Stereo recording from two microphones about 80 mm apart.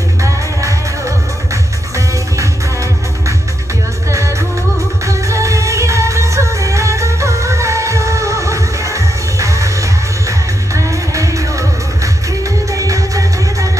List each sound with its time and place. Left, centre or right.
0.2 s music: right
5.0 s music: right